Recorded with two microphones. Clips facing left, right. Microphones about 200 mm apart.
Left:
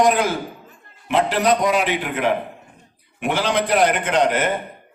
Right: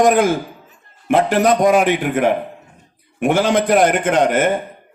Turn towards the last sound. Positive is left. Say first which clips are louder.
# right 4 dB
turn(degrees=-50)  # may be behind; listen again after turning